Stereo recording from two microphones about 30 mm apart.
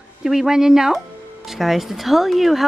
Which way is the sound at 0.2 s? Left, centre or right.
Centre.